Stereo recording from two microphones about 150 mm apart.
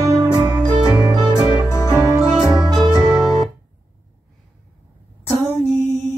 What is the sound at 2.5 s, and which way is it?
Music, 30° right (ahead or behind).